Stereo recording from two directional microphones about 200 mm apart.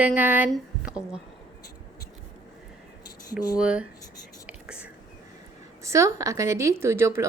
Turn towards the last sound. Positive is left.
turn(degrees=-15)  # may be behind; listen again after turning